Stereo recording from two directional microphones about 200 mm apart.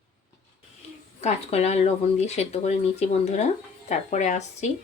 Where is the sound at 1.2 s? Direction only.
35° left (ahead or behind).